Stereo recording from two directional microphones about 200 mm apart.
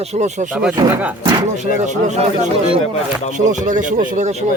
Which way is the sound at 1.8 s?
35° right (ahead or behind).